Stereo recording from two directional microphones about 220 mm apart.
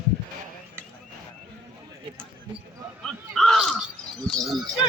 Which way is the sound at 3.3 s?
Centre (ahead or behind).